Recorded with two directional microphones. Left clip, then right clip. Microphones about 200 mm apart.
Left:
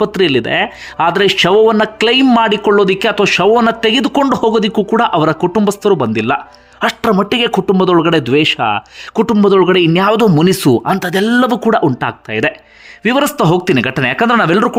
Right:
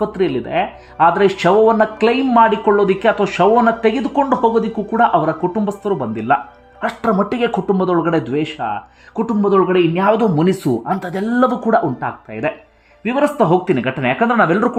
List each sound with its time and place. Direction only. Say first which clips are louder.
0.0 s speech: left 6 dB; 20° left (ahead or behind)